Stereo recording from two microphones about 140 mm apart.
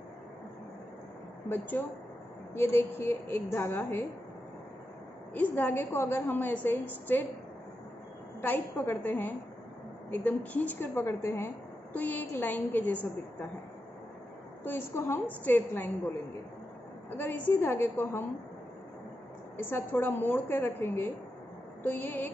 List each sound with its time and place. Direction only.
1.5 s a woman's voice: 15° left (ahead or behind)
5.3 s a woman's voice: 15° left (ahead or behind)
8.4 s a woman's voice: 15° left (ahead or behind)
14.6 s a woman's voice: 15° left (ahead or behind)
17.2 s a woman's voice: 15° left (ahead or behind)
19.5 s a woman's voice: 15° left (ahead or behind)